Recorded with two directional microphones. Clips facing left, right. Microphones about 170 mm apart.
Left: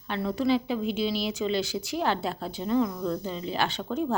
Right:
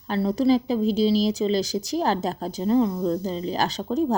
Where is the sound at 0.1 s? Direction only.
35° right (ahead or behind).